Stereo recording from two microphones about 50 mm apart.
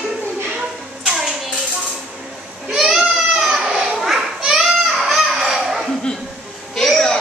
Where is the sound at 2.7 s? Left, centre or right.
Centre.